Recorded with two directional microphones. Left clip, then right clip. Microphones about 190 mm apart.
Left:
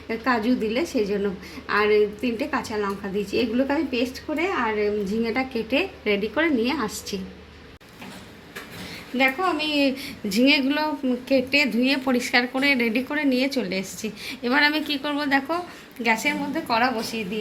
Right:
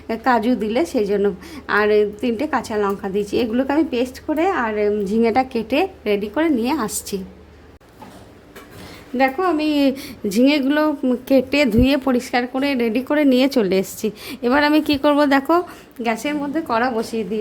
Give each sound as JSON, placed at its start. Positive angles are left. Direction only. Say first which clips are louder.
{"t": 0.1, "sound": "a woman's voice", "louder": "right 6 dB", "side_deg": -45}
{"t": 9.1, "sound": "a woman's voice", "louder": "right 4 dB", "side_deg": -60}